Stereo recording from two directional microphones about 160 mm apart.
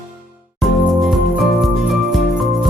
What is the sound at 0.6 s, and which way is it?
Music, centre (ahead or behind).